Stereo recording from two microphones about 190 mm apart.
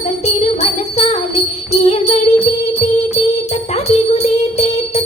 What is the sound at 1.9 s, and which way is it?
Jingle bell, 35° left (ahead or behind).